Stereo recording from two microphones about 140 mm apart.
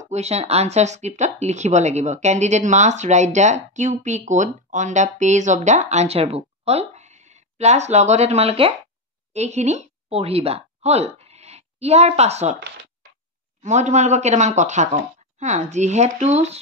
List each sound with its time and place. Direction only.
0.0 s a woman's voice: 50° right (ahead or behind)
13.6 s speech: 55° right (ahead or behind)